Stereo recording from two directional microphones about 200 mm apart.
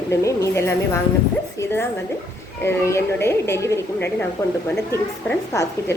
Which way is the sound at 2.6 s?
10° left (ahead or behind).